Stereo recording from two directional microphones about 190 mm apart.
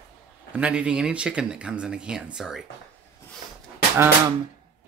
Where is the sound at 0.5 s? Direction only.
5° right (ahead or behind).